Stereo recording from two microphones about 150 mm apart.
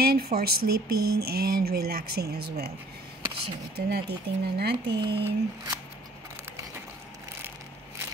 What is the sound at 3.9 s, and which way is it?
Speech, 90° right.